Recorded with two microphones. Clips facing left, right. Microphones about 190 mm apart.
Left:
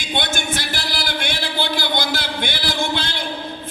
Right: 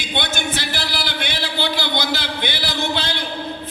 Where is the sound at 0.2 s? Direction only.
50° left (ahead or behind).